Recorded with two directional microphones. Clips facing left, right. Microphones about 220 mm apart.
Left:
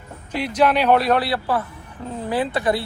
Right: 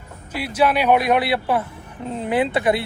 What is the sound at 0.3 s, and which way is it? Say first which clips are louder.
Speech: left 1 dB; 5° right (ahead or behind).